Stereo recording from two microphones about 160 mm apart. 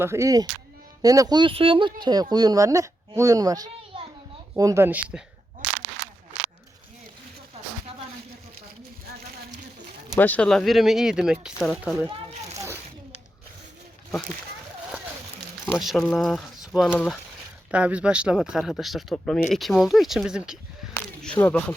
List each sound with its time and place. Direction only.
0.0 s speech: 15° right (ahead or behind)
10.2 s speech: 10° left (ahead or behind)
12.5 s a sound: 15° right (ahead or behind)
15.7 s speech: centre (ahead or behind)
20.9 s a sound: 5° left (ahead or behind)
21.4 s speech: 10° left (ahead or behind)